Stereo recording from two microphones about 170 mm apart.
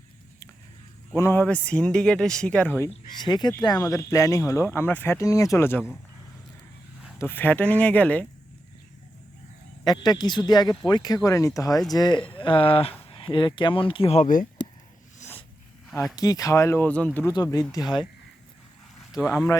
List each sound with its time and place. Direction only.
1.1 s speech: 15° left (ahead or behind)
3.2 s speech: 25° left (ahead or behind)
7.2 s speech: 10° left (ahead or behind)
9.8 s speech: 25° left (ahead or behind); by 14.4 s 45° left (ahead or behind)
15.2 s zipper: 45° left (ahead or behind)
15.9 s speech: centre (ahead or behind)
16.1 s speech: 20° left (ahead or behind)
17.3 s speech: 20° left (ahead or behind)